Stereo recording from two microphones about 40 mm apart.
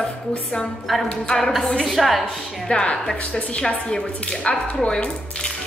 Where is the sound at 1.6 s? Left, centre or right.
Centre.